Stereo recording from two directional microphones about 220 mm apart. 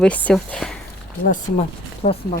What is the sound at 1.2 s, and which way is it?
Speech, 35° left (ahead or behind).